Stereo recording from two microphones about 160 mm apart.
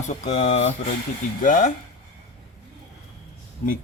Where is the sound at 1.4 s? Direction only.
55° left (ahead or behind).